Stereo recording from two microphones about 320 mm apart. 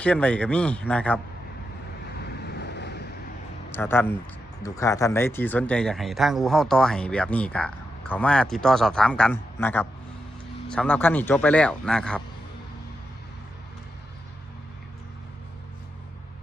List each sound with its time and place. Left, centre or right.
0.0 s speech: centre
2.1 s vehicle: left
3.7 s speech: centre